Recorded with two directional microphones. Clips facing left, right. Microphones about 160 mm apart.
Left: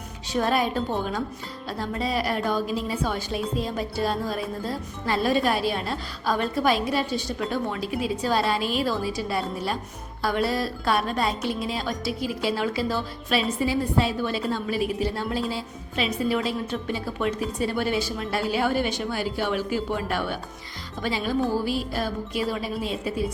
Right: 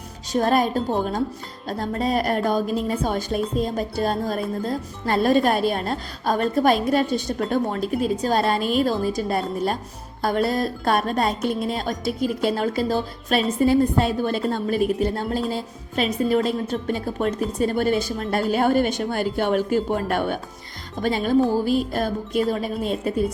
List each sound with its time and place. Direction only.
0.3 s speech: 40° right (ahead or behind)